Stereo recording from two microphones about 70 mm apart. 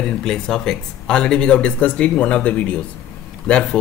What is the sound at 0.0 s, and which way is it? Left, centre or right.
Speech, centre.